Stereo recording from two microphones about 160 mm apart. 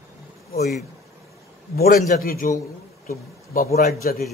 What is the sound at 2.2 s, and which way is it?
A man's voice, 65° left (ahead or behind).